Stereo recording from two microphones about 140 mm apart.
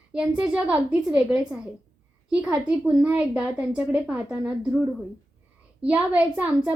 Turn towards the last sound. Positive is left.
turn(degrees=-10)  # may be behind; listen again after turning